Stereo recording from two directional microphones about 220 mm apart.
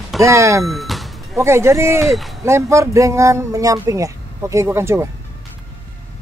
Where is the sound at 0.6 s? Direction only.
Centre (ahead or behind).